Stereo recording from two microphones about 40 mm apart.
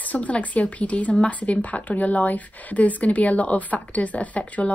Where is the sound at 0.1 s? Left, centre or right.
Left.